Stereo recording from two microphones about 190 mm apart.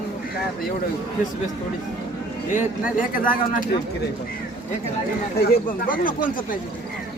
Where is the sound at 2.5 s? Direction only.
45° left (ahead or behind).